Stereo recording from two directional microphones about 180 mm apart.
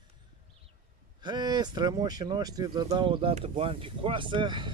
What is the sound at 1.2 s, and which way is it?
Speech, 25° right (ahead or behind).